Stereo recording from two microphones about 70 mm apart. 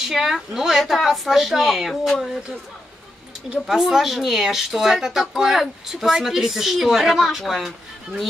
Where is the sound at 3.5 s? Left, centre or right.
Centre.